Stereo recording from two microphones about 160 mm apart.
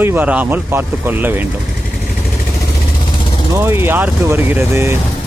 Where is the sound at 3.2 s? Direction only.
30° left (ahead or behind).